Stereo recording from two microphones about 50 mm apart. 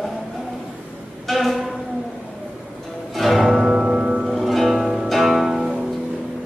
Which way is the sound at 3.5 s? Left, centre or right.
Centre.